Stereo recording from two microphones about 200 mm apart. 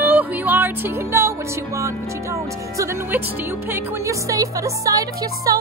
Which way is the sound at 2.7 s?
15° right (ahead or behind).